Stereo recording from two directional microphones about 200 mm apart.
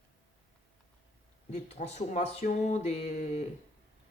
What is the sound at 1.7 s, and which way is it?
Speech, 35° left (ahead or behind).